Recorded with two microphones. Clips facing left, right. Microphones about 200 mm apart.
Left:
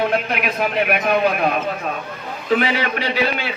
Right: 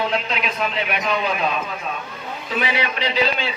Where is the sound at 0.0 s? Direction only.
55° left (ahead or behind).